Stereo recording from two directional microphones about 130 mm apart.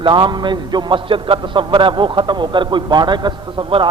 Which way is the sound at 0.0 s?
40° right (ahead or behind).